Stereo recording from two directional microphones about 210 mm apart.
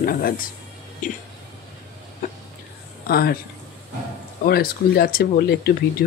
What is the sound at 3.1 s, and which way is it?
Speech, 50° left (ahead or behind).